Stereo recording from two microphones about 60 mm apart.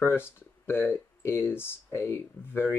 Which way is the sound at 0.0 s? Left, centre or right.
Left.